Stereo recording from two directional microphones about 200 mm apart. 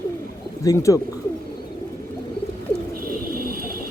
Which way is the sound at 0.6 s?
15° left (ahead or behind).